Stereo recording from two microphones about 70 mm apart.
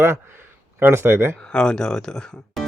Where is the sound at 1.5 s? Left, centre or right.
Centre.